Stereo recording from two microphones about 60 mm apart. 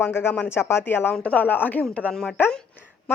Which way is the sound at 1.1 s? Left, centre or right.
Left.